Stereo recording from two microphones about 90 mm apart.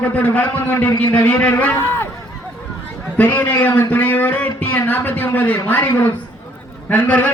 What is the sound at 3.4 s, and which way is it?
A man's voice, 20° left (ahead or behind).